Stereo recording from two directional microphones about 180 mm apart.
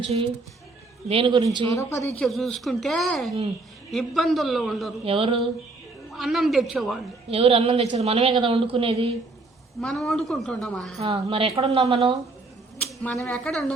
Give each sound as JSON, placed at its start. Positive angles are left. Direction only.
{"t": 1.0, "sound": "speech", "side_deg": -30}
{"t": 1.7, "sound": "a woman's voice", "side_deg": 15}
{"t": 2.2, "sound": "a woman's voice", "side_deg": 0}
{"t": 5.0, "sound": "a woman's voice", "side_deg": -30}
{"t": 6.1, "sound": "a woman's voice", "side_deg": 0}
{"t": 7.3, "sound": "a woman's voice", "side_deg": -30}
{"t": 9.8, "sound": "a woman's voice", "side_deg": 0}
{"t": 11.0, "sound": "a woman's voice", "side_deg": -30}
{"t": 13.0, "sound": "a woman's voice", "side_deg": 10}